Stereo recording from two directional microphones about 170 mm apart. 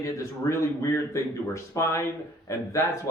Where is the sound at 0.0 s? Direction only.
20° left (ahead or behind).